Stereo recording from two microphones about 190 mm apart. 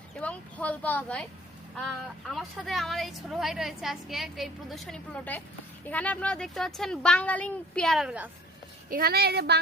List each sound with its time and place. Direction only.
0.2 s speech: 5° left (ahead or behind)
2.3 s a woman's voice: centre (ahead or behind)
8.9 s a woman's voice: 50° right (ahead or behind)